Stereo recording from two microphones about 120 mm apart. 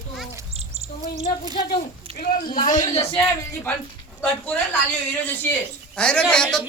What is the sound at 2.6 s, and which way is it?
Speech, 85° left.